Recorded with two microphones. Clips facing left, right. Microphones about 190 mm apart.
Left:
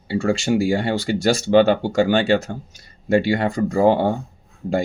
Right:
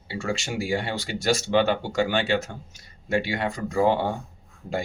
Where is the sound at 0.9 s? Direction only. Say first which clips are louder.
Left 6 dB; 35° left (ahead or behind).